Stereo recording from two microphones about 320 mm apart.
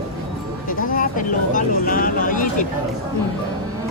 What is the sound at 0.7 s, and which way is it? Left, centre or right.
Speech, left.